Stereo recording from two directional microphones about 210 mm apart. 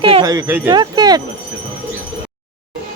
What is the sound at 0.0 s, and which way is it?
Speech, 20° right (ahead or behind).